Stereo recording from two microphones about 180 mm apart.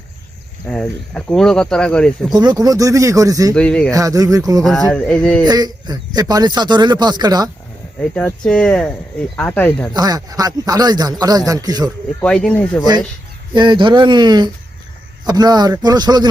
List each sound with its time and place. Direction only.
0.7 s speech: 5° left (ahead or behind)
2.3 s speech: 20° right (ahead or behind)
3.5 s speech: 5° left (ahead or behind)
3.9 s speech: 20° right (ahead or behind)
4.9 s speech: 5° left (ahead or behind)
5.5 s speech: 20° right (ahead or behind)
8.1 s speech: 5° left (ahead or behind)
9.9 s speech: 20° right (ahead or behind)
12.2 s speech: 5° left (ahead or behind)
13.5 s speech: 25° right (ahead or behind)